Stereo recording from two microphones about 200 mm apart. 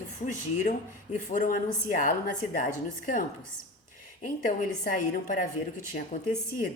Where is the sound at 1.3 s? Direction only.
40° left (ahead or behind).